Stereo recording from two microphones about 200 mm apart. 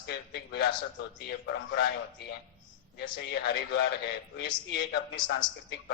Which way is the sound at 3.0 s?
55° left (ahead or behind).